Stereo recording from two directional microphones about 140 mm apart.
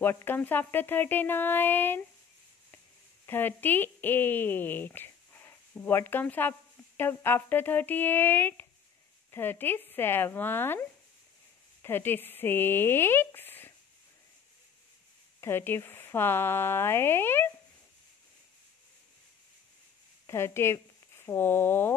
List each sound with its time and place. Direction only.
0.0 s speech: 15° left (ahead or behind)
3.3 s speech: 15° left (ahead or behind)
15.4 s speech: 15° left (ahead or behind)
20.2 s speech: 20° left (ahead or behind)